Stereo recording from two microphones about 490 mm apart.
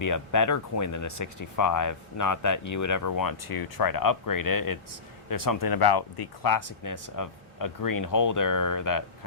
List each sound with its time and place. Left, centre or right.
0.0 s speech: left